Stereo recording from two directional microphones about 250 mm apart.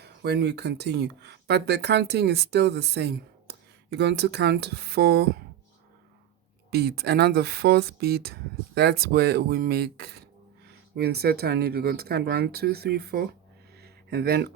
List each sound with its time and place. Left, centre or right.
0.0 s speech: right
6.7 s speech: right
13.8 s a sound: right